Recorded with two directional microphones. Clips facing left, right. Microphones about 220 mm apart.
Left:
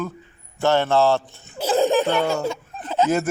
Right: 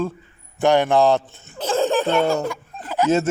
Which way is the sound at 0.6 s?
15° right (ahead or behind).